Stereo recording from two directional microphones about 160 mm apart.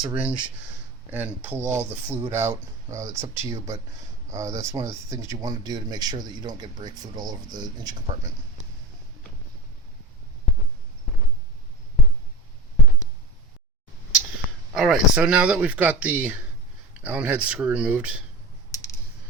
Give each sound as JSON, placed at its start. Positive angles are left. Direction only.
{"t": 0.0, "sound": "speech", "side_deg": -10}
{"t": 14.7, "sound": "speech", "side_deg": -5}
{"t": 18.7, "sound": "typing", "side_deg": 20}